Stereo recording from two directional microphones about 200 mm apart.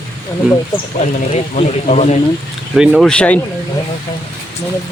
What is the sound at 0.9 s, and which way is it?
Speech, 35° left (ahead or behind).